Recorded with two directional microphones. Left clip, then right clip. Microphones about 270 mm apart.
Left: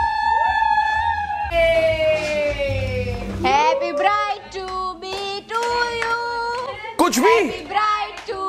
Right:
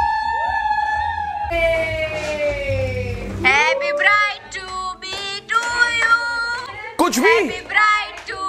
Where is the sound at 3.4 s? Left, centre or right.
Centre.